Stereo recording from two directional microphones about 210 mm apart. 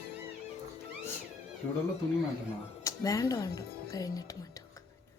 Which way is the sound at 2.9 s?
15° left (ahead or behind).